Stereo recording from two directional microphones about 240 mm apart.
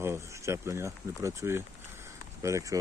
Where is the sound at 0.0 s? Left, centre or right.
Centre.